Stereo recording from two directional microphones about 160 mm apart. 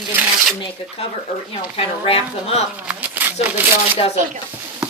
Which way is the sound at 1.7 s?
35° left (ahead or behind).